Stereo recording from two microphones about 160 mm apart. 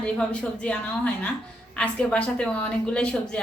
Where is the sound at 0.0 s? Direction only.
5° left (ahead or behind).